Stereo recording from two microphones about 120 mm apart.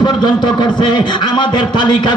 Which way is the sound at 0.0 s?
40° left (ahead or behind).